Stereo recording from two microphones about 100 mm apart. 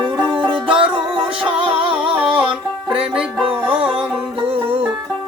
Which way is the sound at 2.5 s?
10° right (ahead or behind).